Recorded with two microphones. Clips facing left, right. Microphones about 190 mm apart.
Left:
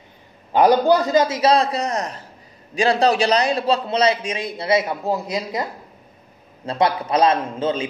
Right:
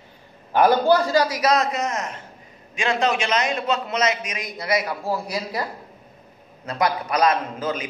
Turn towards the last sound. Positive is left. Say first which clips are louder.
# left 4 dB
turn(degrees=30)  # may be behind; listen again after turning